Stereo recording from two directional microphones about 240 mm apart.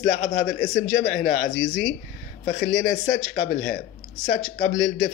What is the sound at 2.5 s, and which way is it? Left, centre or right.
Speech, left.